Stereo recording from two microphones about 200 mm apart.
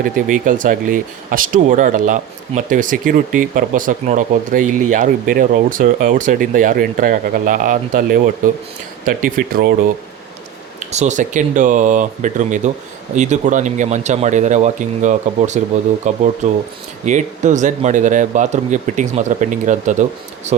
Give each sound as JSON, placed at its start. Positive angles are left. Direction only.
{"t": 0.0, "sound": "speech", "side_deg": -40}
{"t": 10.8, "sound": "speech", "side_deg": -35}